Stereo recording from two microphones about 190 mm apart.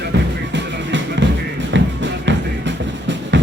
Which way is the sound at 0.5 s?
70° right (ahead or behind).